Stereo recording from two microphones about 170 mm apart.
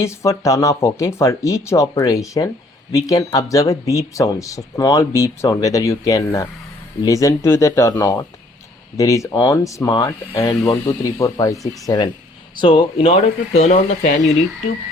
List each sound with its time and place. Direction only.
0.0 s speech: 15° left (ahead or behind)
12.5 s speech: 25° left (ahead or behind); by 14.3 s 45° left (ahead or behind)